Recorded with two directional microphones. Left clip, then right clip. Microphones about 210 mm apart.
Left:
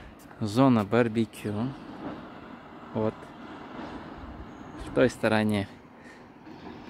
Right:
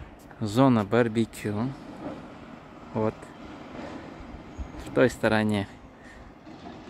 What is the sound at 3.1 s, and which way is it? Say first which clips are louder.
Vehicle: right 1 dB; 35° right (ahead or behind).